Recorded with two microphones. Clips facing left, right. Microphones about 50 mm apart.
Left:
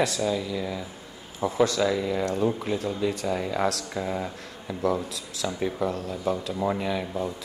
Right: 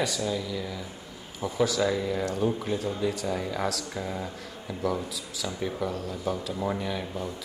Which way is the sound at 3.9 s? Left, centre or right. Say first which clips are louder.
Left 4 dB; centre.